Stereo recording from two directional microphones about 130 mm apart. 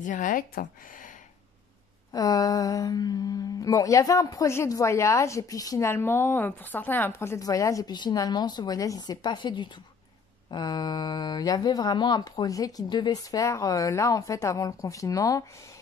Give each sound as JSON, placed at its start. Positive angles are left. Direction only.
{"t": 0.0, "sound": "speech", "side_deg": 85}
{"t": 2.1, "sound": "speech", "side_deg": 30}